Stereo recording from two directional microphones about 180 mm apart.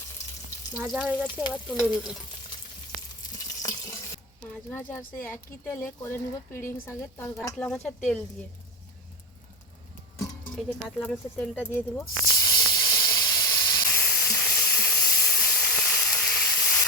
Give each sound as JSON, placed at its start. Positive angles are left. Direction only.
{"t": 0.8, "sound": "speech", "side_deg": -10}
{"t": 1.3, "sound": "frying", "side_deg": 25}
{"t": 3.6, "sound": "stir", "side_deg": 20}
{"t": 4.5, "sound": "speech", "side_deg": 10}
{"t": 10.5, "sound": "snake", "side_deg": 5}